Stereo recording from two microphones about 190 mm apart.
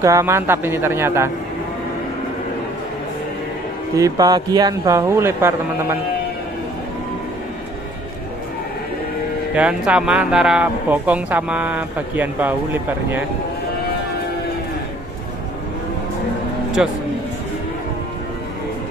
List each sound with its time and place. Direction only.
0.0 s speech: 15° right (ahead or behind)
3.9 s speech: 20° right (ahead or behind)
9.6 s speech: 5° right (ahead or behind)
16.8 s a man's voice: 5° right (ahead or behind)